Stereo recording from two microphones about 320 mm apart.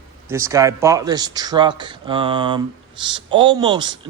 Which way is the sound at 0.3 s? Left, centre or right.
Centre.